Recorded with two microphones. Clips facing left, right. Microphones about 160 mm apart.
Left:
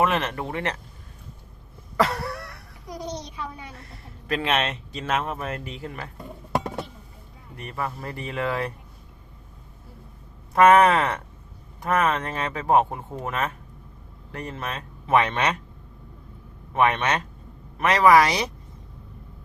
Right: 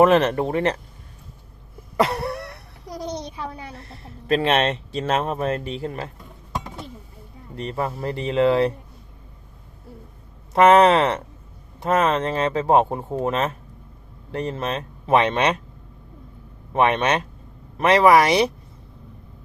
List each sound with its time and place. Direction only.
0.0 s a man's voice: 35° right (ahead or behind)
2.0 s a sound: 25° right (ahead or behind)
2.8 s a woman's voice: 30° right (ahead or behind)
7.5 s speech: 25° right (ahead or behind)
10.5 s speech: 25° right (ahead or behind)
16.7 s speech: 25° right (ahead or behind)